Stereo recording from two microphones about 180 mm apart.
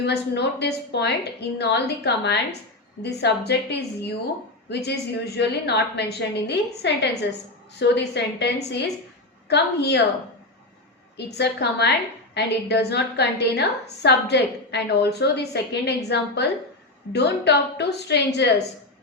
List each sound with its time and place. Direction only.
0.0 s a woman's voice: 70° left (ahead or behind)
11.3 s a woman's voice: 70° left (ahead or behind)